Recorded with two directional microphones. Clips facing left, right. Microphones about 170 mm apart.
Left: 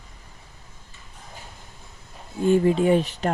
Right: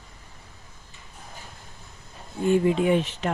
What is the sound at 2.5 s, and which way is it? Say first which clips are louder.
Speech: left 2 dB; 35° left (ahead or behind).